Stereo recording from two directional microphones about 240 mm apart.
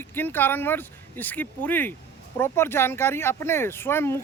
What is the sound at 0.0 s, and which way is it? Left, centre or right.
Speech, centre.